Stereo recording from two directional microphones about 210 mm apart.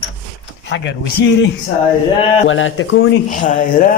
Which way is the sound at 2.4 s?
65° left (ahead or behind).